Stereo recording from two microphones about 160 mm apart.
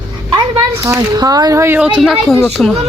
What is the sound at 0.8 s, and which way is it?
Speech, 20° right (ahead or behind).